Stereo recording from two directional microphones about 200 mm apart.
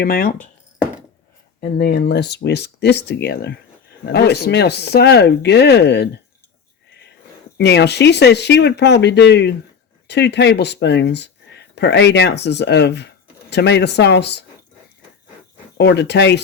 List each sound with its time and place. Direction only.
0.0 s speech: 50° left (ahead or behind)
1.8 s speech: 60° left (ahead or behind)
7.6 s speech: 55° left (ahead or behind)
15.8 s speech: 60° left (ahead or behind)